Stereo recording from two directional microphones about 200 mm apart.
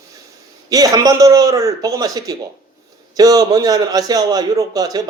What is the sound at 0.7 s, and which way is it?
A man's voice, 15° right (ahead or behind).